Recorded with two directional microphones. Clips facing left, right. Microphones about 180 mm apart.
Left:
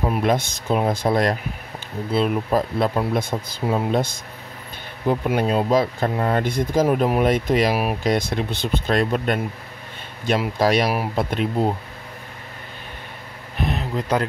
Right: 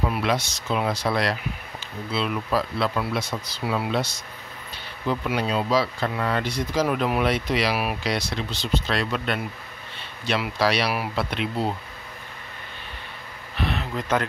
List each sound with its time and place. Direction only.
0.1 s speech: 45° left (ahead or behind)
13.6 s speech: 40° left (ahead or behind)